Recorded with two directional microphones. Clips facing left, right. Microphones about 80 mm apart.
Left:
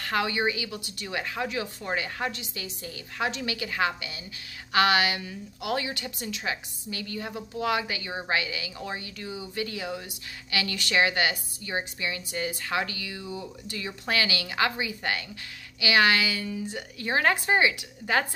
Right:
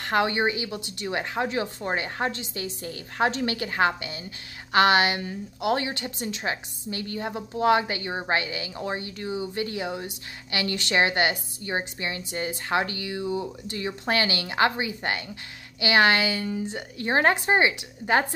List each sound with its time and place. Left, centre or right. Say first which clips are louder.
0.0 s a woman's voice: right 3 dB; right